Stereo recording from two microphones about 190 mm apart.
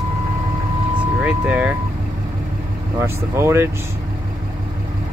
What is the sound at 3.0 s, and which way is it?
Speech, 15° right (ahead or behind).